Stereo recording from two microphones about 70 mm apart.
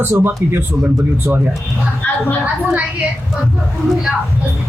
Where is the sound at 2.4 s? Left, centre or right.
Right.